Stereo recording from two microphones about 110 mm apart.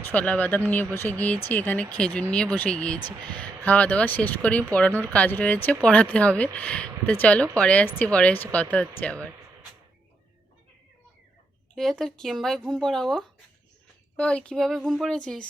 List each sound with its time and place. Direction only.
0.0 s speech: 15° left (ahead or behind)
11.7 s speech: 5° left (ahead or behind)